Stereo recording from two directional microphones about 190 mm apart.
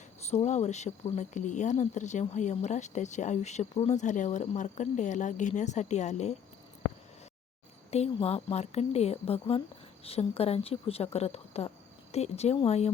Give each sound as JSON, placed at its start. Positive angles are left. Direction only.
{"t": 0.3, "sound": "speech", "side_deg": 35}
{"t": 7.9, "sound": "speech", "side_deg": 35}